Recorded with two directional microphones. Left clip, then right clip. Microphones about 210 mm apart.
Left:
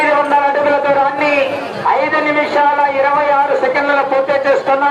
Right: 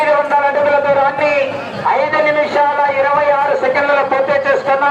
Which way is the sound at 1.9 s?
50° left (ahead or behind).